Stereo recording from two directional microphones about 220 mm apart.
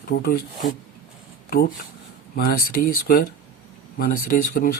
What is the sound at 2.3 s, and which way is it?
Speech, 45° left (ahead or behind).